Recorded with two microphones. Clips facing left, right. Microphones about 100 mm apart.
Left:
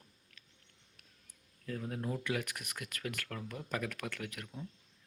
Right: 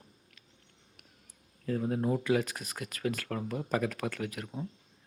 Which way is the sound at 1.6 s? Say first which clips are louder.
Right 9 dB; 25° right (ahead or behind).